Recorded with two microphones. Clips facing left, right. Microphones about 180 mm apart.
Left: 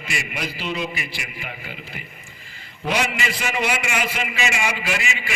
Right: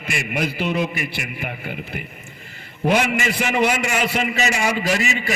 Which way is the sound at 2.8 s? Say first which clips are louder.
Right 5 dB; 50° right (ahead or behind).